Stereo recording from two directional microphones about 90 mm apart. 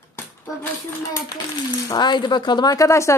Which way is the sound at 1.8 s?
50° left (ahead or behind).